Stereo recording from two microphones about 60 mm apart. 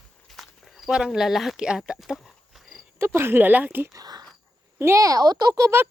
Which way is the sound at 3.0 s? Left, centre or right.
Right.